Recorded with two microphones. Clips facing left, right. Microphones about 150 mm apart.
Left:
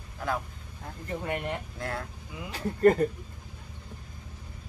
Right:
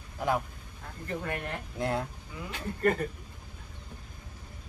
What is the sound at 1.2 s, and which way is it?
Speech, 20° left (ahead or behind).